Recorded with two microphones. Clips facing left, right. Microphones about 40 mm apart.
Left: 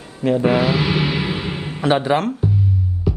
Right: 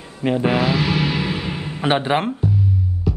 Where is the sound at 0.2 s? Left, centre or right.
Right.